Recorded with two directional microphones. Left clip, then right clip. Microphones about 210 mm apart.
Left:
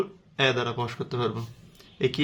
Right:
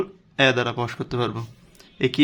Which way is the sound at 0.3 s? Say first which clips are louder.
Right 5 dB; 45° right (ahead or behind).